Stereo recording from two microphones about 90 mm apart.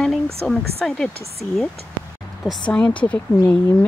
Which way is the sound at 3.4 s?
25° left (ahead or behind).